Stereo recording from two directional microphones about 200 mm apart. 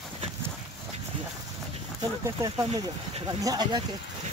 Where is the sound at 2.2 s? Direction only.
15° right (ahead or behind).